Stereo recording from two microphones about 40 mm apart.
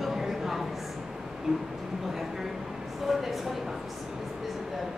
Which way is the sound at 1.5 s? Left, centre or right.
Centre.